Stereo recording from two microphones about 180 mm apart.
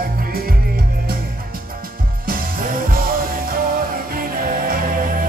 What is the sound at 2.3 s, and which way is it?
Music, 55° right (ahead or behind).